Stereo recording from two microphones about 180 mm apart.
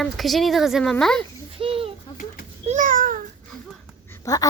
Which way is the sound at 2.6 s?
45° right (ahead or behind).